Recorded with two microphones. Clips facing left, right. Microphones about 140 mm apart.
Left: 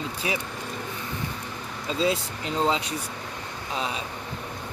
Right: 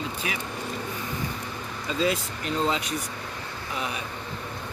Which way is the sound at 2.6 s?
25° left (ahead or behind).